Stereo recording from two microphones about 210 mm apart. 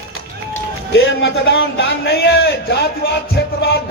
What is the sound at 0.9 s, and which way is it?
A man's voice, 50° left (ahead or behind).